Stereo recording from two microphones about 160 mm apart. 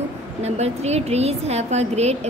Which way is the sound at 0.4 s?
40° right (ahead or behind).